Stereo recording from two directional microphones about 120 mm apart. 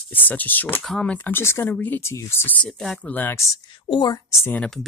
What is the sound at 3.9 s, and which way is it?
Speech, 35° left (ahead or behind).